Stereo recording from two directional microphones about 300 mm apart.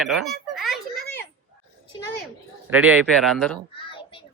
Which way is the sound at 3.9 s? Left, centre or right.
Centre.